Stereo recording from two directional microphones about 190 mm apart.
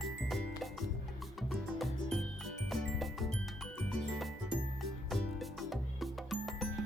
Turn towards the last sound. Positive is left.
turn(degrees=0)  # may be behind; listen again after turning